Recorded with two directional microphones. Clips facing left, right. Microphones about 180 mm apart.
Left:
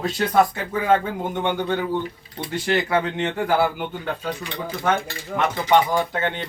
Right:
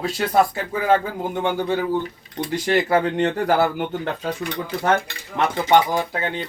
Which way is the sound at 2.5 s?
35° right (ahead or behind).